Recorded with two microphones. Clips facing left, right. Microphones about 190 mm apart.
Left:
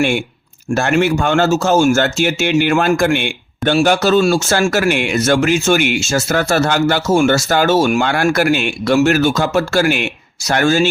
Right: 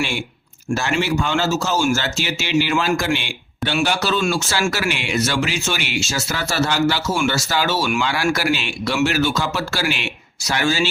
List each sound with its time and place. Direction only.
0.7 s speech: 55° left (ahead or behind)